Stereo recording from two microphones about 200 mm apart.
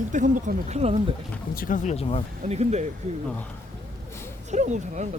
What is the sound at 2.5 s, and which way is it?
Speech, 35° right (ahead or behind).